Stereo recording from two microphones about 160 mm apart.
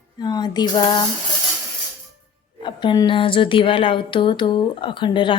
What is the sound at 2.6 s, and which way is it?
Speech, 30° left (ahead or behind).